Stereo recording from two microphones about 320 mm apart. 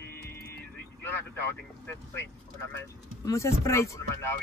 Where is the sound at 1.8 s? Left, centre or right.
Centre.